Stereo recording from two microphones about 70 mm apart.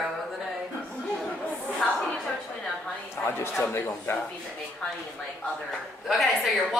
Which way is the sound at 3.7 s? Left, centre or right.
Left.